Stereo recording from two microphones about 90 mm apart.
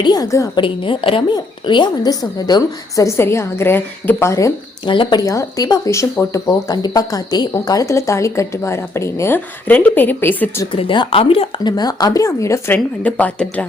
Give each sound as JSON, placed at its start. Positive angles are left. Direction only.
{"t": 0.0, "sound": "a woman's voice", "side_deg": 45}
{"t": 0.5, "sound": "a woman's voice", "side_deg": 75}
{"t": 1.3, "sound": "a woman's voice", "side_deg": 60}
{"t": 4.2, "sound": "a woman's voice", "side_deg": 35}
{"t": 4.9, "sound": "speech", "side_deg": 60}
{"t": 5.2, "sound": "a woman's voice", "side_deg": 35}
{"t": 10.7, "sound": "speech", "side_deg": 70}
{"t": 11.6, "sound": "a woman's voice", "side_deg": 50}
{"t": 12.7, "sound": "speech", "side_deg": 15}